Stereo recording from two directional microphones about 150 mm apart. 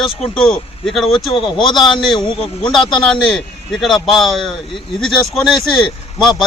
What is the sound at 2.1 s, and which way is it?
Speech, 30° left (ahead or behind).